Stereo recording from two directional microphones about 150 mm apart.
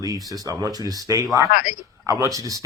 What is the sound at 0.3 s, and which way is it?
Speech, 25° right (ahead or behind).